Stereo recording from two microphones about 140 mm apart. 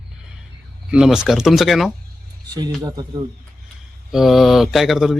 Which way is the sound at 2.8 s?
25° right (ahead or behind).